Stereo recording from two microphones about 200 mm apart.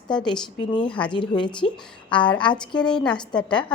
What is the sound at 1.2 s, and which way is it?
A woman's voice, 25° left (ahead or behind).